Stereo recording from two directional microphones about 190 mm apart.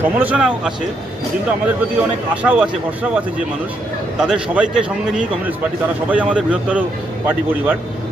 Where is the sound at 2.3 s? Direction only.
5° right (ahead or behind).